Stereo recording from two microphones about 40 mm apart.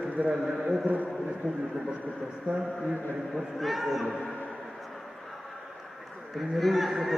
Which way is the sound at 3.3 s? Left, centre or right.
Centre.